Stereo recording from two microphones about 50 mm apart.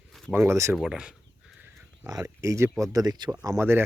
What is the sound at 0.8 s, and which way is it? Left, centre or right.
Speech, centre.